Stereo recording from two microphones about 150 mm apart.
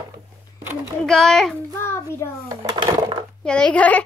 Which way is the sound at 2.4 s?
30° right (ahead or behind).